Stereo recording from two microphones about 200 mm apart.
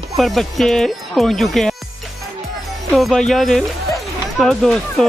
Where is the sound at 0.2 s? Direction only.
Centre (ahead or behind).